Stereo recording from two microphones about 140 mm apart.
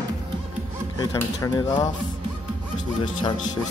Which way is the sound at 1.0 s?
25° left (ahead or behind).